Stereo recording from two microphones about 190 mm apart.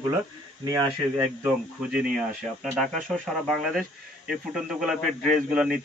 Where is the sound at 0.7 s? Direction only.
15° right (ahead or behind).